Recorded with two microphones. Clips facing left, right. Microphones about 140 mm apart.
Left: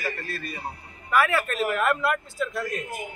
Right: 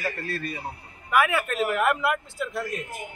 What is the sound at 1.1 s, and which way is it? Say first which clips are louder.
A man's voice: even; 15° right (ahead or behind).